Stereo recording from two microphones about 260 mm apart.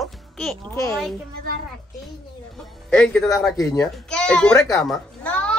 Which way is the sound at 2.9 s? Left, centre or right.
Centre.